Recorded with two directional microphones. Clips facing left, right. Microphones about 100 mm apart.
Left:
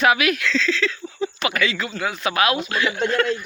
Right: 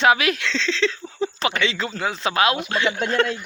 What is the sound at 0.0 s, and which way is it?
Speech, 30° right (ahead or behind).